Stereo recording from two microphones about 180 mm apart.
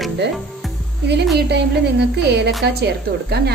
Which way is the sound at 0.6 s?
Centre (ahead or behind).